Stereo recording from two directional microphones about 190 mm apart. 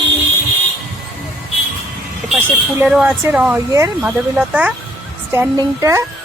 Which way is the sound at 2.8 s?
5° right (ahead or behind).